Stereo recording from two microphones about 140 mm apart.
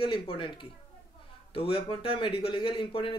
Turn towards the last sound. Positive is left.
turn(degrees=40)  # may be behind; listen again after turning